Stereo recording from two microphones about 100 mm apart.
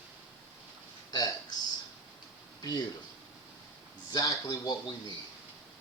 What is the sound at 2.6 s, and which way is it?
Speech, 35° left (ahead or behind).